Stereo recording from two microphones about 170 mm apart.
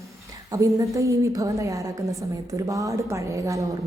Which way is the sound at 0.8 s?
20° right (ahead or behind).